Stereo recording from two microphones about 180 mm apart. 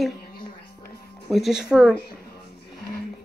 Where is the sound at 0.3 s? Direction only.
55° left (ahead or behind).